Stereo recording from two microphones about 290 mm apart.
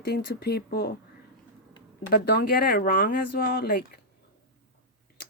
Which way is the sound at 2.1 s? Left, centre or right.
Left.